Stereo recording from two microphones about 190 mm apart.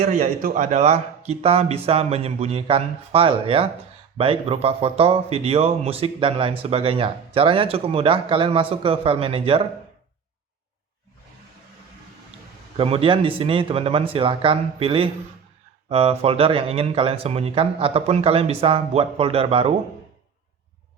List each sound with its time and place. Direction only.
0.1 s speech: 45° right (ahead or behind); by 9.6 s 30° right (ahead or behind)
12.7 s speech: 30° right (ahead or behind)